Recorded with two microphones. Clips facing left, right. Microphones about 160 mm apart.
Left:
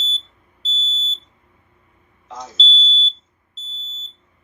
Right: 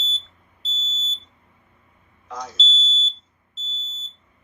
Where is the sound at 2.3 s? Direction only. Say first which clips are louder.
Right 1 dB; 25° left (ahead or behind).